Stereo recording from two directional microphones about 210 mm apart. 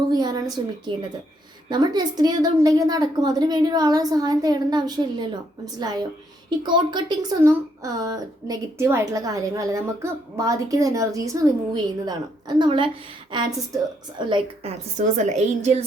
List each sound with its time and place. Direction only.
0.1 s a woman's voice: 20° right (ahead or behind)